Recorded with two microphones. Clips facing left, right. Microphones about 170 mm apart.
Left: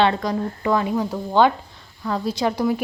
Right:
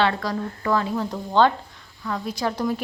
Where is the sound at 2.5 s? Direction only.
10° left (ahead or behind).